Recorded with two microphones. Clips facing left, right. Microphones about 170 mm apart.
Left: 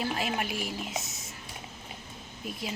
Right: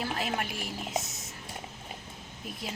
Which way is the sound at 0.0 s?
5° left (ahead or behind).